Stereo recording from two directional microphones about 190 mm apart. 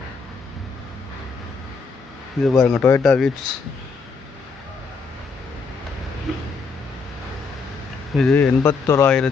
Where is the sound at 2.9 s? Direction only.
10° left (ahead or behind).